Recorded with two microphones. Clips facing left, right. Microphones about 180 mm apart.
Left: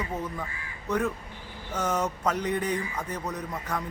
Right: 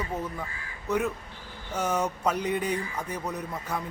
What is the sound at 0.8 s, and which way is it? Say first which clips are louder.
Speech: even; 10° right (ahead or behind).